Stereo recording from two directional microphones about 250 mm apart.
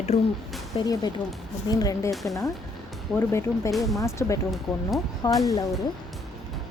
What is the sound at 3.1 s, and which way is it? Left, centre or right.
Speech, centre.